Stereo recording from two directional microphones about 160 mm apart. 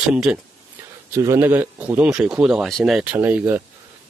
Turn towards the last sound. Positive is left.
turn(degrees=-10)  # may be behind; listen again after turning